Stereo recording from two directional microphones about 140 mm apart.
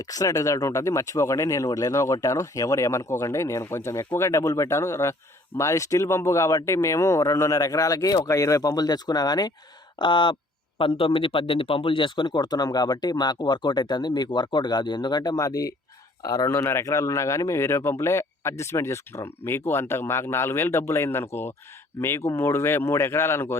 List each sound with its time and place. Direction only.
0.0 s a man's voice: 25° left (ahead or behind)